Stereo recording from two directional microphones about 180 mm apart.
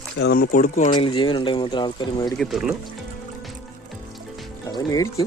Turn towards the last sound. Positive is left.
turn(degrees=20)  # may be behind; listen again after turning